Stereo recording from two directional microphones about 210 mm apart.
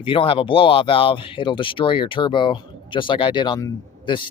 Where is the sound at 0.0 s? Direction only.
25° left (ahead or behind).